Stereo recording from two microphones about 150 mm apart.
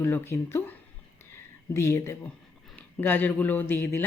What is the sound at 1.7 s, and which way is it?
A woman's voice, 20° left (ahead or behind).